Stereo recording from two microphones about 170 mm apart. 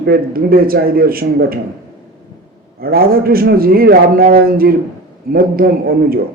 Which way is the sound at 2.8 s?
60° right (ahead or behind).